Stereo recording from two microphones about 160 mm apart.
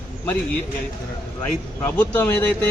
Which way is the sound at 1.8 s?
15° left (ahead or behind).